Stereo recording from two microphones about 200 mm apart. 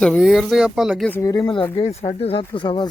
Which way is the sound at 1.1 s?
15° left (ahead or behind).